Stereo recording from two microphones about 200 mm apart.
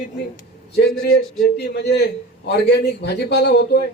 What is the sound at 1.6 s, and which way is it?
A man's voice, 55° left (ahead or behind).